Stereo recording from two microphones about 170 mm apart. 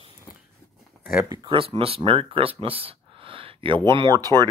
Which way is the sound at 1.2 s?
25° right (ahead or behind).